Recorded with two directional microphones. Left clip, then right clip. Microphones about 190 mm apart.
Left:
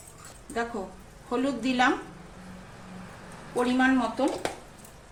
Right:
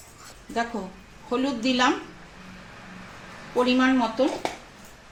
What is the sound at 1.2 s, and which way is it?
Speech, 50° right (ahead or behind).